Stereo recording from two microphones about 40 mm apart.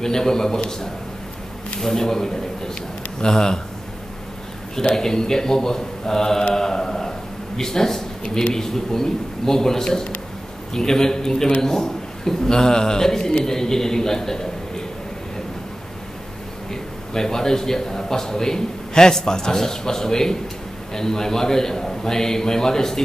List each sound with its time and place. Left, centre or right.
0.0 s a man's voice: centre
1.8 s a man's voice: centre
4.9 s a man's voice: centre
17.1 s a man's voice: centre